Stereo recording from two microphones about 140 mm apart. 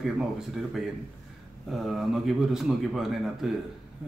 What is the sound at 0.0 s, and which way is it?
Speech, centre (ahead or behind).